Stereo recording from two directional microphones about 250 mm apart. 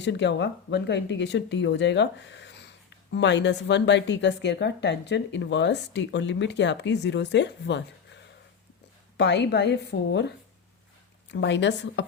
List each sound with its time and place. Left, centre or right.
0.0 s speech: left